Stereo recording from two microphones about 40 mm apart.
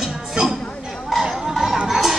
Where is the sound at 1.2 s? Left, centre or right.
Centre.